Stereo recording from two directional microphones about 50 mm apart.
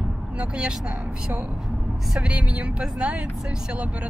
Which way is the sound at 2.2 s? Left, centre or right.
Right.